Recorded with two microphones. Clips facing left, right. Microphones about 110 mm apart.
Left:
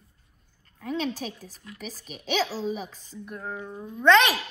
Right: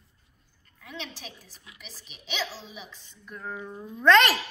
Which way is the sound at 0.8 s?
45° left (ahead or behind).